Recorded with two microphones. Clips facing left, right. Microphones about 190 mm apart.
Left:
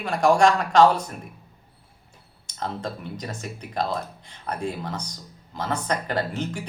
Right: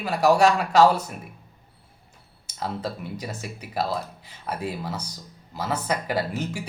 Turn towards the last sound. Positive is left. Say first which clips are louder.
# even
turn(degrees=-10)  # may be behind; listen again after turning